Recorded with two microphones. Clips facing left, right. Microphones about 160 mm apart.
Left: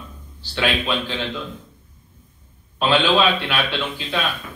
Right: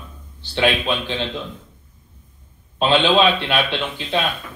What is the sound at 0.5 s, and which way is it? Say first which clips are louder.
Speech: right 2 dB; 20° right (ahead or behind).